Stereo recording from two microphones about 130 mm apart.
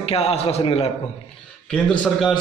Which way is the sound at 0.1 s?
50° left (ahead or behind).